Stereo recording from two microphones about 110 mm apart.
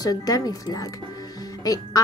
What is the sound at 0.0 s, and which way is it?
Speech, 35° left (ahead or behind).